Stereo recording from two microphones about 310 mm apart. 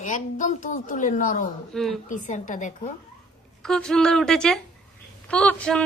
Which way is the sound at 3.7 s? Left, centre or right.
Centre.